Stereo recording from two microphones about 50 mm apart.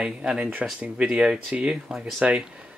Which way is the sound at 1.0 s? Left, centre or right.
Right.